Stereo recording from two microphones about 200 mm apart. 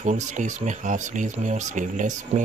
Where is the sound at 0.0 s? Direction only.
35° right (ahead or behind).